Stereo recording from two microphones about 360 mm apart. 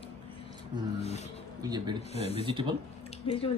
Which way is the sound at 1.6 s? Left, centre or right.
Centre.